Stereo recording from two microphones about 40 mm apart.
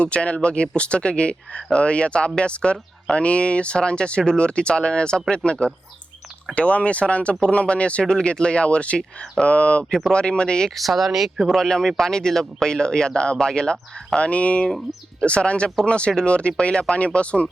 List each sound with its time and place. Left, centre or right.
0.0 s speech: left
10.8 s speech: centre
11.5 s speech: centre
14.2 s speech: left